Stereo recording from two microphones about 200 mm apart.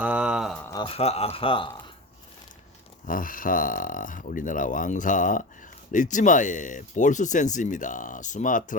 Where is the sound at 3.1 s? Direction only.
45° left (ahead or behind).